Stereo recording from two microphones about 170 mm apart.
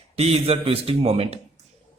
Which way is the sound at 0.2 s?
35° right (ahead or behind).